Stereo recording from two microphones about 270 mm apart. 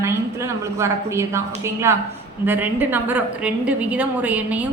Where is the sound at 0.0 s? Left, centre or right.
Centre.